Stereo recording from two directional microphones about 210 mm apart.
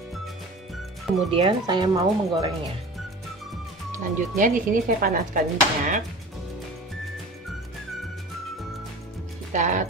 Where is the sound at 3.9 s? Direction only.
40° right (ahead or behind).